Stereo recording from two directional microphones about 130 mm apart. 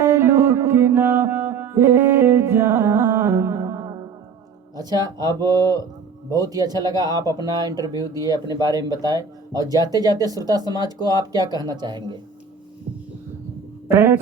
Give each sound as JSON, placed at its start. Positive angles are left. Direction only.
{"t": 0.0, "sound": "music", "side_deg": -20}
{"t": 4.8, "sound": "speech", "side_deg": -30}
{"t": 13.8, "sound": "speech", "side_deg": -20}